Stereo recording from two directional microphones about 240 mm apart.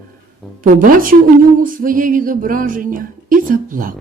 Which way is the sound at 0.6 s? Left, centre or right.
Right.